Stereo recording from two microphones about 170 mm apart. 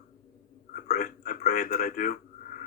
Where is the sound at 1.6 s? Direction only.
65° left (ahead or behind).